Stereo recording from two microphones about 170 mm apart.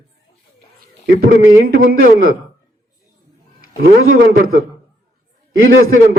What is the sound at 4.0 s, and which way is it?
Speech, 55° right (ahead or behind).